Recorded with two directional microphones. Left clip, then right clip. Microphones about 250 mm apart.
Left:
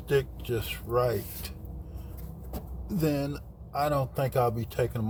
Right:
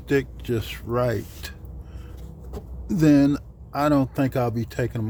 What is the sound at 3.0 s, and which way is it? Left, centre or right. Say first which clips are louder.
Speech: right 11 dB; right.